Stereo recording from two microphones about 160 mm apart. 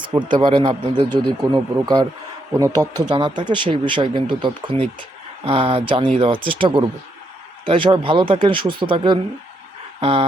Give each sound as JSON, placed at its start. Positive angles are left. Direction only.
{"t": 0.1, "sound": "speech", "side_deg": -30}